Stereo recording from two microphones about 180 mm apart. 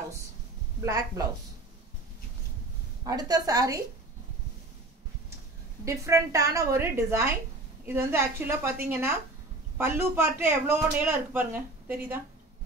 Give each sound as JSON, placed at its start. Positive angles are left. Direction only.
{"t": 0.7, "sound": "speech", "side_deg": -15}
{"t": 3.0, "sound": "a woman's voice", "side_deg": -20}
{"t": 5.9, "sound": "speech", "side_deg": -15}